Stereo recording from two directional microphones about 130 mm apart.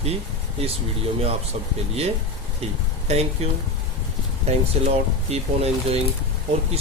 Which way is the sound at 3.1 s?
55° right (ahead or behind).